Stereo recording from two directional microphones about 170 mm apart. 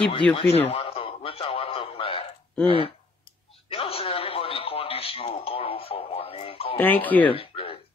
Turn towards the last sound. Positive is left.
turn(degrees=35)  # may be behind; listen again after turning